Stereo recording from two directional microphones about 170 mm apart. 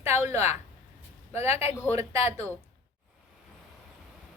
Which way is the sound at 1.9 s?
40° left (ahead or behind).